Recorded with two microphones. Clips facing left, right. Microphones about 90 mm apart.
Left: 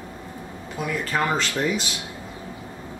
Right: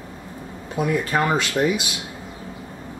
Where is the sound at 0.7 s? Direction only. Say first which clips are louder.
Right 4 dB; 20° right (ahead or behind).